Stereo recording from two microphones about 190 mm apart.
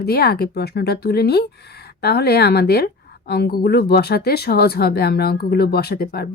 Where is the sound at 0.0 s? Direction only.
55° left (ahead or behind).